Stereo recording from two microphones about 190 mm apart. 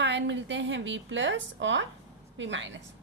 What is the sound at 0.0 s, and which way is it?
A woman's voice, 70° right (ahead or behind).